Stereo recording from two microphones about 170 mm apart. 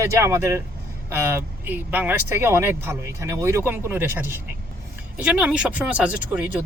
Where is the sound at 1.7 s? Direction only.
10° right (ahead or behind).